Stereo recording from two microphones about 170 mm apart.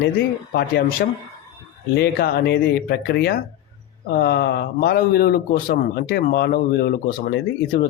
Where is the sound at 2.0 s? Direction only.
65° left (ahead or behind).